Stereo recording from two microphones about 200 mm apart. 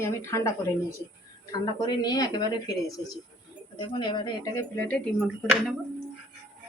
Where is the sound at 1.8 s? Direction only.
20° left (ahead or behind).